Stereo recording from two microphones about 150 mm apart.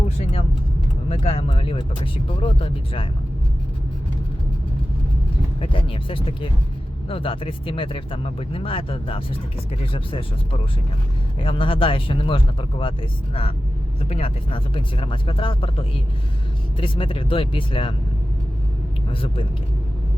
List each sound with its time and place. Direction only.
1.1 s speech: 45° left (ahead or behind)
5.5 s speech: 35° left (ahead or behind)
19.0 s speech: 35° left (ahead or behind)